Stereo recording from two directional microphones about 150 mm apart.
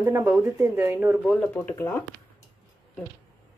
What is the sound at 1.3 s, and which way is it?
Speech, 10° left (ahead or behind).